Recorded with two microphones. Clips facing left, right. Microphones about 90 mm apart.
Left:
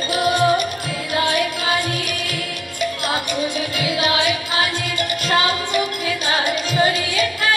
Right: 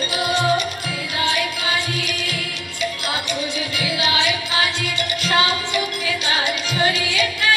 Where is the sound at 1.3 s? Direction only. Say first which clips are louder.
Left 2 dB; 50° left (ahead or behind).